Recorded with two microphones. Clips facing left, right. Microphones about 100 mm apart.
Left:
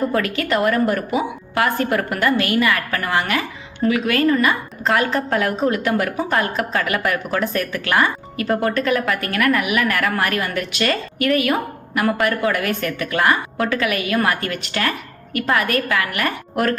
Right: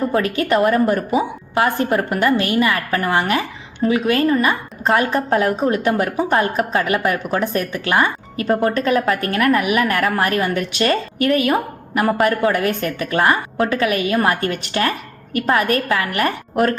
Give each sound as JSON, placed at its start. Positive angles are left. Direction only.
{"t": 0.1, "sound": "a woman's voice", "side_deg": -25}